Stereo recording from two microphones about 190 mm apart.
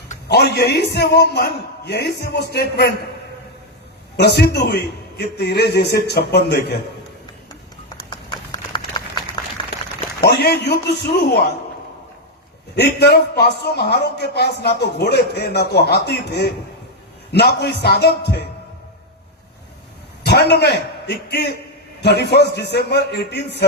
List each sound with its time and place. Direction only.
0.3 s a man's voice: 60° left (ahead or behind)
4.4 s a man's voice: 60° left (ahead or behind)
8.1 s horse: 25° left (ahead or behind)
10.2 s a man's voice: 60° left (ahead or behind)
12.7 s a man's voice: 60° left (ahead or behind)
20.2 s a man's voice: 60° left (ahead or behind)